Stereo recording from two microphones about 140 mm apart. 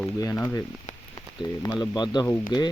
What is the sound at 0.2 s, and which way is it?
Speech, 25° left (ahead or behind).